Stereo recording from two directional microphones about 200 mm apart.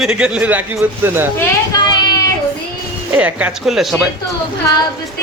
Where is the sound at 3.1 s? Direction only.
5° right (ahead or behind).